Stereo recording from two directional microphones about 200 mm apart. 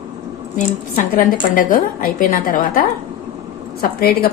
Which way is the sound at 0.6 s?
45° left (ahead or behind).